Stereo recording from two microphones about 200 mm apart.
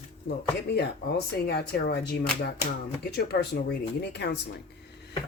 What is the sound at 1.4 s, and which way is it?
Speech, 55° left (ahead or behind).